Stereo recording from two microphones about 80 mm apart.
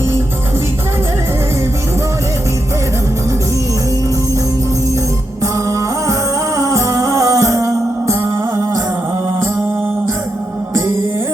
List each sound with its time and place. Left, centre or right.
5.4 s music: right
10.8 s music: right